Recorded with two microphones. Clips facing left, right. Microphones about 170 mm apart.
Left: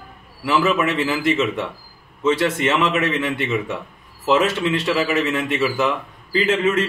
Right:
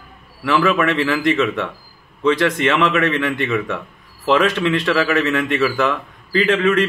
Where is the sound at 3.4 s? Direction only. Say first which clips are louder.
Right 2 dB; 25° left (ahead or behind).